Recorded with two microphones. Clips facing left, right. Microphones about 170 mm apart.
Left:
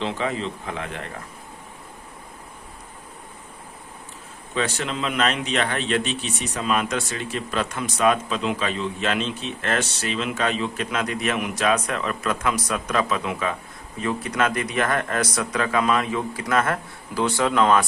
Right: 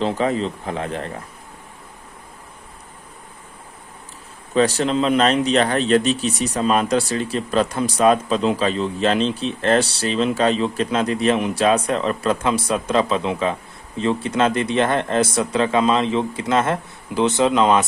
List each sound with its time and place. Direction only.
0.0 s speech: 40° right (ahead or behind)
4.5 s speech: 35° right (ahead or behind); by 17.8 s 20° right (ahead or behind)